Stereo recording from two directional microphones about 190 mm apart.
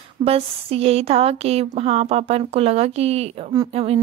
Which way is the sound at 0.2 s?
30° right (ahead or behind).